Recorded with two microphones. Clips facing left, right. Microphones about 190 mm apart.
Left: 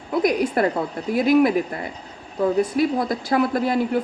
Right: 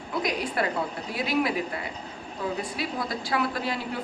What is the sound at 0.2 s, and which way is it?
A woman's voice, 50° left (ahead or behind).